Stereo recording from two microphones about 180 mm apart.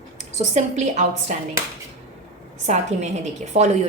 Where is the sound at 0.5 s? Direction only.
40° right (ahead or behind).